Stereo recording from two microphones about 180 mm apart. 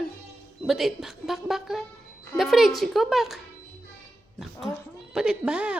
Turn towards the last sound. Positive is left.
turn(degrees=-5)  # may be behind; listen again after turning